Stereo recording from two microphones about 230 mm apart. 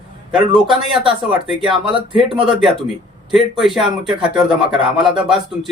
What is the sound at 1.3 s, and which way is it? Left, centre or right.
Speech, centre.